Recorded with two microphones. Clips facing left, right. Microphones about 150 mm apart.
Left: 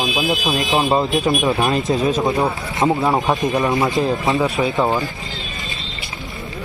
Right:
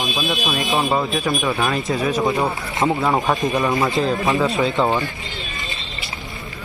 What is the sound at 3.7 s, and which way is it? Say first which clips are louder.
Speech: left 1 dB; 20° left (ahead or behind).